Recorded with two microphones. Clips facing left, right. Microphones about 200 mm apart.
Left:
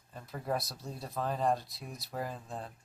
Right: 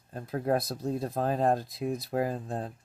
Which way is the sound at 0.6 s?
50° right (ahead or behind).